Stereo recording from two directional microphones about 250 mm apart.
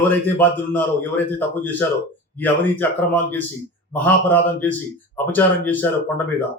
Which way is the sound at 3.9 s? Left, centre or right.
Centre.